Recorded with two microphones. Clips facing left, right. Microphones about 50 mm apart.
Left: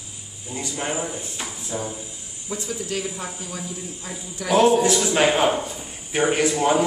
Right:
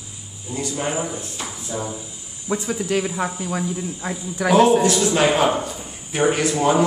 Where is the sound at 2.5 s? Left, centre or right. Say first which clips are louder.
Right 6 dB; right.